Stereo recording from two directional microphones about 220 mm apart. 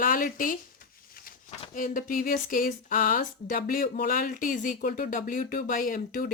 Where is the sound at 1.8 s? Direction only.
35° left (ahead or behind).